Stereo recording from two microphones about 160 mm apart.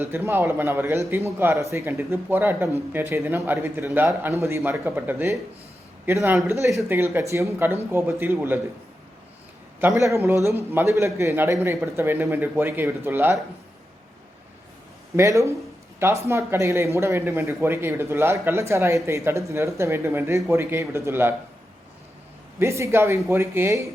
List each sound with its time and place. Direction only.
0.0 s speech: 15° right (ahead or behind)
9.8 s speech: 20° right (ahead or behind)
15.1 s speech: 20° right (ahead or behind)
22.5 s speech: 15° right (ahead or behind)